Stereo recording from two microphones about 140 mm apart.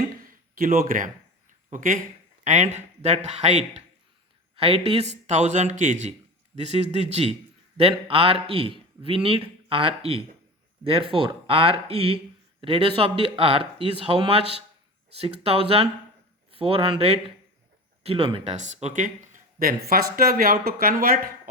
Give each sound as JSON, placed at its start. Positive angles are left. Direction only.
{"t": 0.2, "sound": "a sound", "side_deg": -90}
{"t": 2.4, "sound": "a man's voice", "side_deg": -60}
{"t": 18.5, "sound": "speech", "side_deg": -55}